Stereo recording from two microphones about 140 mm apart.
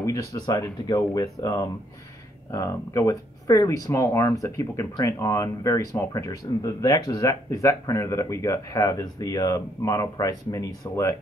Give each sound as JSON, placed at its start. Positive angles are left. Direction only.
{"t": 0.0, "sound": "speech", "side_deg": 20}